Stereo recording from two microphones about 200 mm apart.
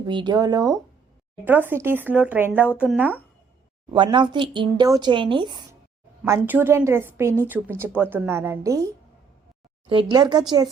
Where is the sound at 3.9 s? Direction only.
25° right (ahead or behind).